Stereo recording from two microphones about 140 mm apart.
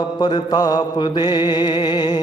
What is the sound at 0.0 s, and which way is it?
Mantra, 30° left (ahead or behind).